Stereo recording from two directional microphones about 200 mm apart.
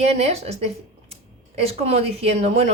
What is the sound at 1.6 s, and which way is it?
A woman's voice, 30° right (ahead or behind).